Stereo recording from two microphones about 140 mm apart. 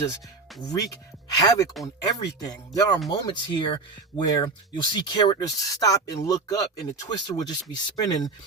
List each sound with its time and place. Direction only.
0.6 s speech: 25° left (ahead or behind)